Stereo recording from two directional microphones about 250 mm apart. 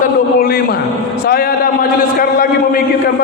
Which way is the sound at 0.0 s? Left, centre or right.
Left.